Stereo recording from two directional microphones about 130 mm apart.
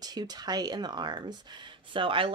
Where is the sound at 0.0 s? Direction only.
30° right (ahead or behind).